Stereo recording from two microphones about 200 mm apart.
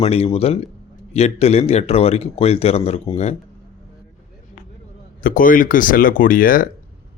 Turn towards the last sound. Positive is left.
turn(degrees=45)  # may be behind; listen again after turning